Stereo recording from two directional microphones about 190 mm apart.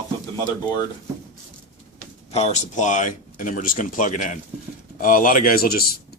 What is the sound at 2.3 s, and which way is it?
Speech, 35° left (ahead or behind).